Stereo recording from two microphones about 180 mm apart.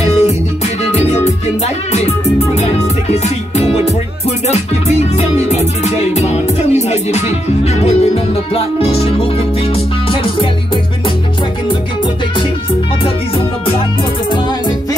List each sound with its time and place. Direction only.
0.0 s music: 35° left (ahead or behind)